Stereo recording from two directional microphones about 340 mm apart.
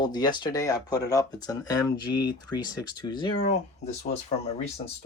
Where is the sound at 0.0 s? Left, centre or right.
Centre.